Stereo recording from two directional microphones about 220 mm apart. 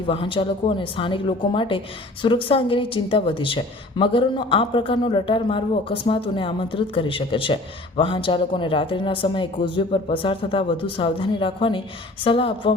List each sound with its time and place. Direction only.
0.1 s speech: 25° left (ahead or behind)